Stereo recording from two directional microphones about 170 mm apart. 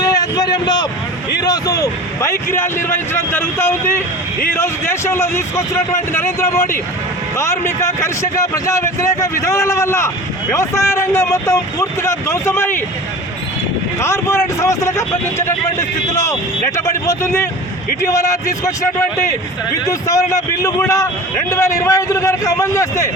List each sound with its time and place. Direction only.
0.1 s a man's voice: 20° left (ahead or behind)
14.0 s speech: 15° left (ahead or behind)